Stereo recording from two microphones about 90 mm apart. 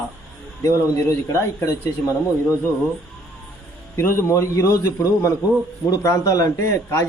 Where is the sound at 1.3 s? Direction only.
25° left (ahead or behind).